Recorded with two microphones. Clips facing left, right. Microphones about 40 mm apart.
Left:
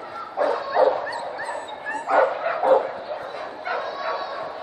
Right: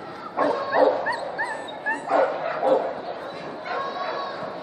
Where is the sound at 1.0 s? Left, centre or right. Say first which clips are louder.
Right 2 dB; right.